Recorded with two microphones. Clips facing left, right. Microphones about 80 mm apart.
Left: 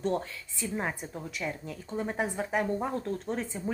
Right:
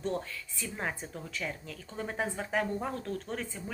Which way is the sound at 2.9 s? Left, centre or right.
Left.